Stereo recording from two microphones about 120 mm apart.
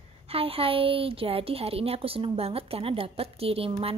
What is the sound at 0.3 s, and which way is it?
Speech, 50° right (ahead or behind).